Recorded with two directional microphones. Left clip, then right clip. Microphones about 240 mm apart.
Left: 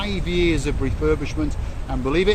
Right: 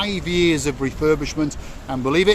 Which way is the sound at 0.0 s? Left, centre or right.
Centre.